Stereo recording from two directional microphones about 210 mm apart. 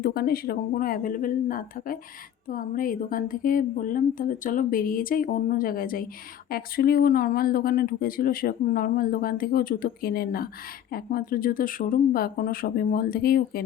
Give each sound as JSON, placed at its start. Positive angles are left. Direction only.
{"t": 0.0, "sound": "speech", "side_deg": 45}